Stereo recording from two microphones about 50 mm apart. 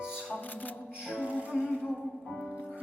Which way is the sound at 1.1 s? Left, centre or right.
Right.